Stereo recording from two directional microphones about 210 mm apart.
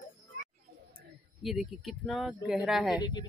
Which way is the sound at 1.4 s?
Centre (ahead or behind).